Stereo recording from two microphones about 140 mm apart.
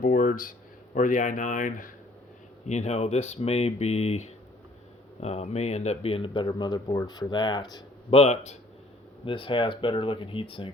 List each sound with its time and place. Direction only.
0.0 s a sound: 75° left (ahead or behind)
0.9 s speech: 65° left (ahead or behind)
2.6 s speech: 55° left (ahead or behind); by 7.9 s 30° left (ahead or behind)
8.1 s speech: 50° left (ahead or behind)
9.2 s speech: 35° left (ahead or behind)